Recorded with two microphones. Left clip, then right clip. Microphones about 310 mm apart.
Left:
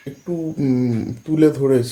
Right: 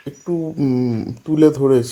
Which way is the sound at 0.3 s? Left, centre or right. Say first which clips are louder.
Right 2 dB; centre.